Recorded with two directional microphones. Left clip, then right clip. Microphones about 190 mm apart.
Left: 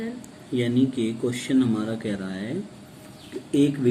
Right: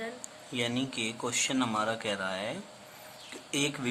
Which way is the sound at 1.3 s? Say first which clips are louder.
Left 6 dB; 55° right (ahead or behind).